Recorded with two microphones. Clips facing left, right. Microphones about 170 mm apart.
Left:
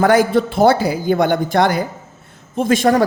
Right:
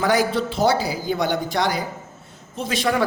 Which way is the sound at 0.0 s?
50° left (ahead or behind).